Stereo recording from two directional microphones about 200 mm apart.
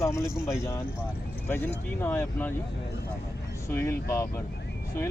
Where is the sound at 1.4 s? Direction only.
10° left (ahead or behind).